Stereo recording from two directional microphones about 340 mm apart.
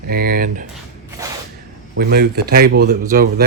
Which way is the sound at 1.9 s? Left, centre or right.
Right.